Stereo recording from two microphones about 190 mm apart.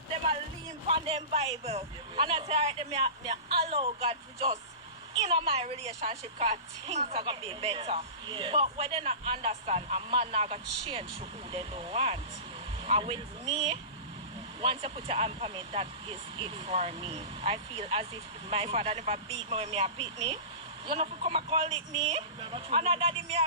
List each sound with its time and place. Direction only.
0.9 s a woman's voice: 30° right (ahead or behind)